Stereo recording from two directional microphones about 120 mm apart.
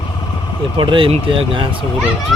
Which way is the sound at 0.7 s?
45° right (ahead or behind).